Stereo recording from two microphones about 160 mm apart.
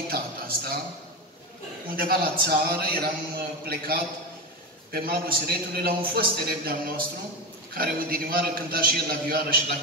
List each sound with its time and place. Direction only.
0.1 s a man's voice: 65° right (ahead or behind)
2.0 s a man's voice: 70° right (ahead or behind)